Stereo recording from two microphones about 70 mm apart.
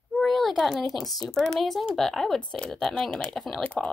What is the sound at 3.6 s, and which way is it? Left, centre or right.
Speech, centre.